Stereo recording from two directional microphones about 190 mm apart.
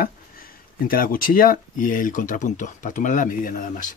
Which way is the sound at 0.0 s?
50° left (ahead or behind).